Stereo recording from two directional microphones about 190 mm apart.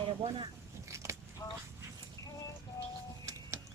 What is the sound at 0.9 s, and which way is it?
Biting, 15° right (ahead or behind).